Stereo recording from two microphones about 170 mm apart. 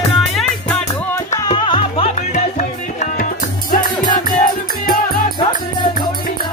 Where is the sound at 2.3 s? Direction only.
45° left (ahead or behind).